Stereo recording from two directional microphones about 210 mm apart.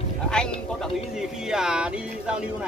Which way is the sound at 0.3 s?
5° left (ahead or behind).